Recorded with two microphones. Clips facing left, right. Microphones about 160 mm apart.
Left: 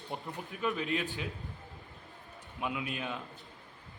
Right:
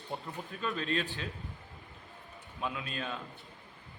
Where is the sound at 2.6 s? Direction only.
15° left (ahead or behind).